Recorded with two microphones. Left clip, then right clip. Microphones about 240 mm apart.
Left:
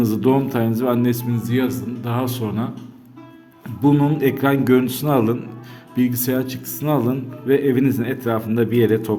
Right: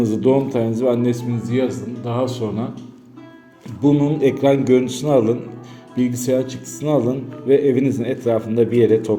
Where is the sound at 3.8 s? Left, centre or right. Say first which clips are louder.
Right 1 dB; left.